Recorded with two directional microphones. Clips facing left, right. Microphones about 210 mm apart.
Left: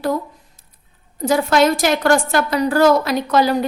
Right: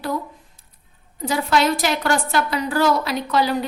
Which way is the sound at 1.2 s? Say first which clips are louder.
Left 5 dB; 45° left (ahead or behind).